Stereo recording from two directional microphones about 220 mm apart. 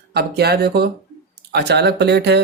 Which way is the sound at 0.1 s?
45° right (ahead or behind).